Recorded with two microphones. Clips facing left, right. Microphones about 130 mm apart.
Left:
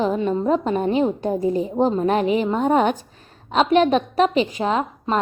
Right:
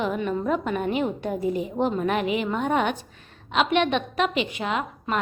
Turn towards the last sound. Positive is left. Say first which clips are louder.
# left 5 dB
turn(degrees=35)  # may be behind; listen again after turning